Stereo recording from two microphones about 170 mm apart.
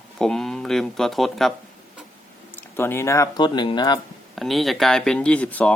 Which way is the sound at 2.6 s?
15° left (ahead or behind).